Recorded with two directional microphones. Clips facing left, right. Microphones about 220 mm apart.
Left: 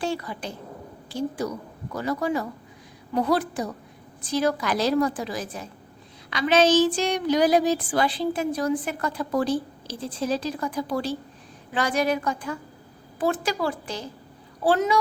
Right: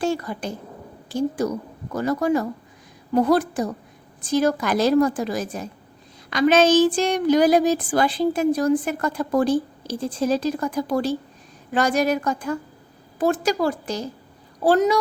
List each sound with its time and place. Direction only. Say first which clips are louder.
0.0 s a woman's voice: right 5 dB; 45° right (ahead or behind)